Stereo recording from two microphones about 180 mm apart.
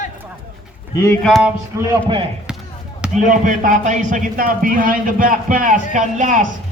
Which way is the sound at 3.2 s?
45° right (ahead or behind).